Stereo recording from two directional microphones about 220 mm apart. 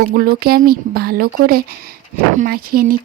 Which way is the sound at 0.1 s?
45° right (ahead or behind).